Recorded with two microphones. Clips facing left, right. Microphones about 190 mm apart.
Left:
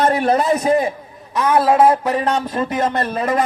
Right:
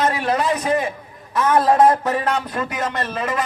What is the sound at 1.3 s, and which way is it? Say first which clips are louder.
A man's voice: left 1 dB; 10° left (ahead or behind).